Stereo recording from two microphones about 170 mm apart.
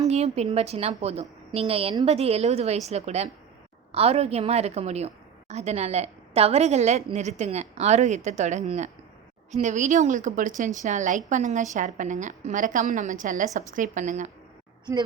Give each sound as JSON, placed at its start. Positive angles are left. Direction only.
{"t": 0.1, "sound": "a woman's voice", "side_deg": -40}